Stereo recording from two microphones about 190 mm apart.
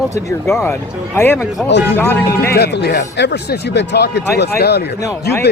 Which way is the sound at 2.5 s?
60° left (ahead or behind).